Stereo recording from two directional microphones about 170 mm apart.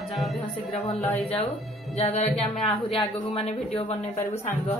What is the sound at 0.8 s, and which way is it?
Speech, 35° left (ahead or behind).